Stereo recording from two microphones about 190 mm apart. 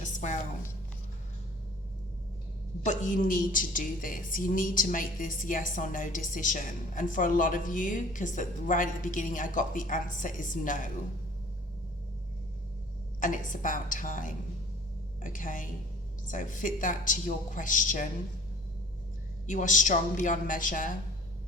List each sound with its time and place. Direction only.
0.0 s a sound: 40° left (ahead or behind)
2.8 s a woman's voice: 40° left (ahead or behind)
13.1 s a woman's voice: 45° left (ahead or behind)
19.5 s a woman's voice: 40° left (ahead or behind)